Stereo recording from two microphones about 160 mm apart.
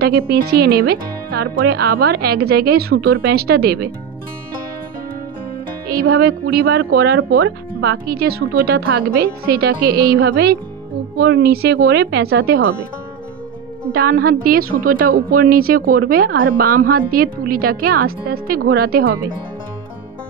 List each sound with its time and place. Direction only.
0.0 s a woman's voice: 80° right
5.9 s speech: 75° right (ahead or behind)
13.9 s a woman's voice: 70° right (ahead or behind)